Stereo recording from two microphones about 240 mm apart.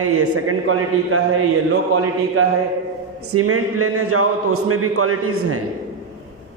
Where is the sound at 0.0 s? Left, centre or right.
Right.